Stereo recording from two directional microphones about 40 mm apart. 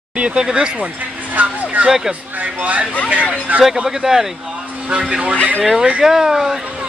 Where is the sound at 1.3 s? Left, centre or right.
Right.